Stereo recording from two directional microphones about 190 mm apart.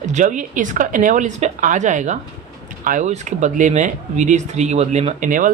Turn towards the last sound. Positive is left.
turn(degrees=-45)  # may be behind; listen again after turning